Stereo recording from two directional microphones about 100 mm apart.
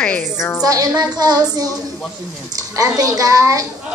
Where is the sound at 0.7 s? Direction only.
40° right (ahead or behind).